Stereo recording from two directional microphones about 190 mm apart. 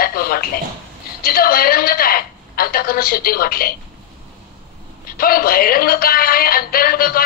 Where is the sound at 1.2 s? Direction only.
50° left (ahead or behind).